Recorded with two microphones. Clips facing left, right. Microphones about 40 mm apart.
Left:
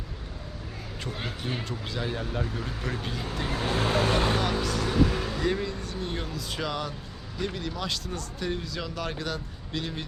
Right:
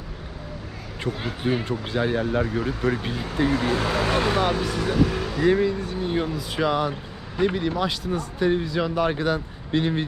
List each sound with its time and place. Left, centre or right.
1.1 s speech: right
1.4 s speech: centre
1.9 s speech: right
3.6 s speech: right
4.4 s speech: right